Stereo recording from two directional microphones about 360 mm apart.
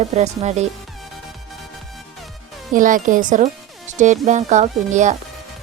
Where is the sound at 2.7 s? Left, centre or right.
Right.